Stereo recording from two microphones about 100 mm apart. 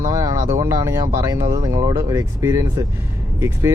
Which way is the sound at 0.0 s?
35° right (ahead or behind).